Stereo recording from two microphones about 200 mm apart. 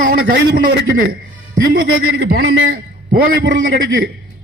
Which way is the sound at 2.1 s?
55° right (ahead or behind).